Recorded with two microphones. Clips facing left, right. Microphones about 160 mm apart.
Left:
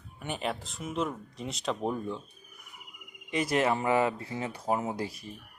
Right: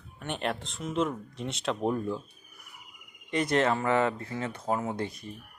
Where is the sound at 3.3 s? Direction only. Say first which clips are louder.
Right 1 dB; 5° left (ahead or behind).